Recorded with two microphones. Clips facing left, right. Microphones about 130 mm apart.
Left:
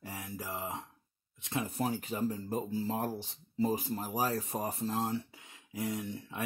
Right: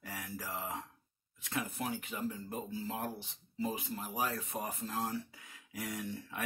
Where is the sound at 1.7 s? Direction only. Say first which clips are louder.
Left 5 dB; 35° left (ahead or behind).